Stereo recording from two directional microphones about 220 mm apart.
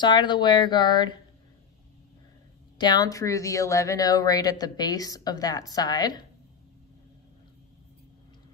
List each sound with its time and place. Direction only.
0.0 s speech: 20° left (ahead or behind)
2.8 s a woman's voice: 20° left (ahead or behind)